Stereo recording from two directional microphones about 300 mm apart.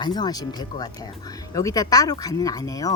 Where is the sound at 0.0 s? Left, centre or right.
Centre.